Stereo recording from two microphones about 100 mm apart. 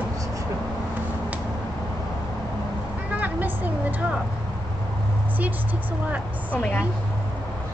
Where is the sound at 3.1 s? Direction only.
15° right (ahead or behind).